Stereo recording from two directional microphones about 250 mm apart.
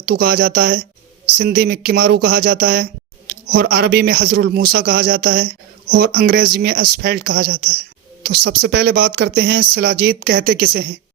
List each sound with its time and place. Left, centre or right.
0.0 s speech: right